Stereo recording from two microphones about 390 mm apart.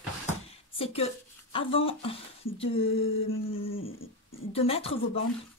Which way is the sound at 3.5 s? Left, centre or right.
Left.